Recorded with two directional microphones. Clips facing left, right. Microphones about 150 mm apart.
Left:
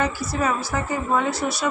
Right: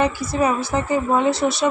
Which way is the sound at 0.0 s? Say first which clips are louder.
Right 4 dB; 20° right (ahead or behind).